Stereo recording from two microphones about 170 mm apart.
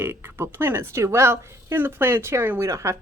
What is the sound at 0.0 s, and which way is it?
A woman's voice, 10° right (ahead or behind).